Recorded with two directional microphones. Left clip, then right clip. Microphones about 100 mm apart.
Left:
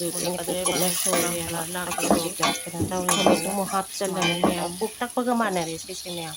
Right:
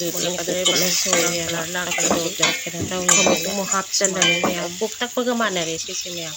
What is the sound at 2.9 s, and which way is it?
Speech, 25° right (ahead or behind).